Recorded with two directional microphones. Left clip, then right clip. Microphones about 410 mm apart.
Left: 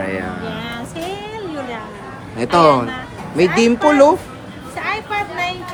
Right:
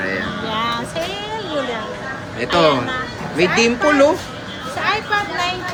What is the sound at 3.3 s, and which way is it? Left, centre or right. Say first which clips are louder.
Speech: left 1 dB; centre.